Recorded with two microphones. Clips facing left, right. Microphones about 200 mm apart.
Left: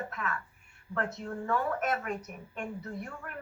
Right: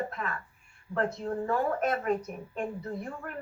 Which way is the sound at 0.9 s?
35° right (ahead or behind).